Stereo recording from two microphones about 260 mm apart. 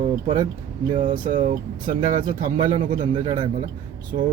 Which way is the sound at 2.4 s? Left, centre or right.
Centre.